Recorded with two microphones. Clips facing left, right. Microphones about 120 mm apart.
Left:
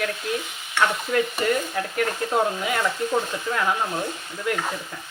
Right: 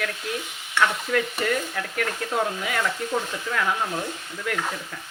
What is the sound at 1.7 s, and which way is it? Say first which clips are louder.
Speech: left 3 dB; 30° left (ahead or behind).